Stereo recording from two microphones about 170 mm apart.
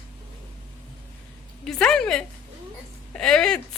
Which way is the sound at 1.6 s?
5° left (ahead or behind).